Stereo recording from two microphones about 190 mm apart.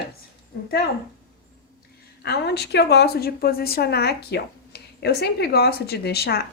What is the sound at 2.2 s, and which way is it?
A woman's voice, 60° left (ahead or behind).